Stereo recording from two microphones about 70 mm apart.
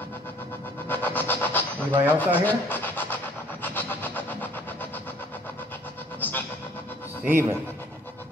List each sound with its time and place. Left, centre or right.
0.8 s a sound: left
3.6 s vehicle: left
7.2 s speech: right